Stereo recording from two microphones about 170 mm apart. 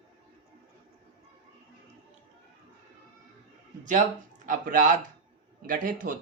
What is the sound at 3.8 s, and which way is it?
Speech, 50° right (ahead or behind).